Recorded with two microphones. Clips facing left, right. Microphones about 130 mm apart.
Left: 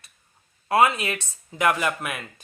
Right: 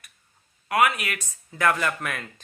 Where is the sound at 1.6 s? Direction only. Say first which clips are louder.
Left 1 dB; 15° left (ahead or behind).